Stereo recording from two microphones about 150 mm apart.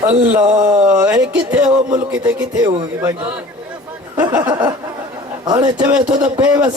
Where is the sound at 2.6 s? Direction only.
25° right (ahead or behind).